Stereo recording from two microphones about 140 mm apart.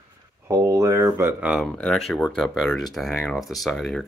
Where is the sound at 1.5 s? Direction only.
Centre (ahead or behind).